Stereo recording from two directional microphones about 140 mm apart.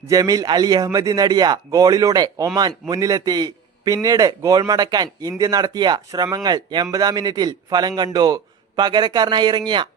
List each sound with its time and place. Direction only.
0.1 s a man's voice: 25° right (ahead or behind)